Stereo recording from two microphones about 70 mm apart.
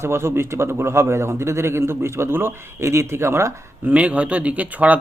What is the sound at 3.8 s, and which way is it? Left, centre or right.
Speech, right.